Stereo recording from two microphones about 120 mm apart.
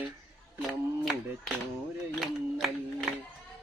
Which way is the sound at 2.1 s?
Centre (ahead or behind).